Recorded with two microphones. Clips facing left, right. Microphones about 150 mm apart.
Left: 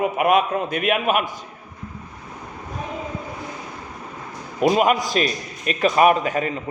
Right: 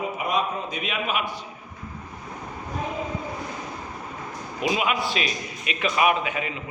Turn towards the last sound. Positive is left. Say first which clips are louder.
# left 5 dB
turn(degrees=40)  # may be behind; listen again after turning